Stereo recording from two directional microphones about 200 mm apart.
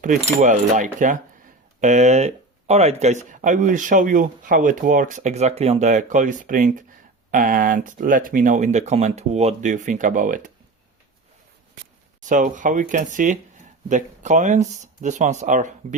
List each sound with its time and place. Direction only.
0.9 s speech: 40° right (ahead or behind)
12.2 s speech: 40° right (ahead or behind)